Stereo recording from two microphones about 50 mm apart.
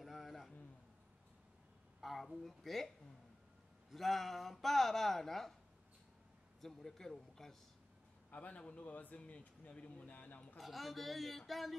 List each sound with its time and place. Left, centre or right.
0.0 s a sound: centre
2.0 s speech: centre
3.9 s speech: centre
6.6 s speech: centre
8.3 s a man's voice: left
10.6 s speech: centre